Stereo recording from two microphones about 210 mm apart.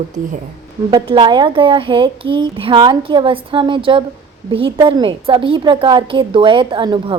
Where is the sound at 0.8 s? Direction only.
20° right (ahead or behind).